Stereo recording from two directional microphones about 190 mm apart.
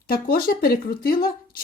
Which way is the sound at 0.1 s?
50° left (ahead or behind).